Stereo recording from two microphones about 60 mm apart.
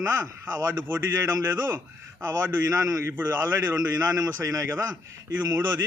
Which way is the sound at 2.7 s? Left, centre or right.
Right.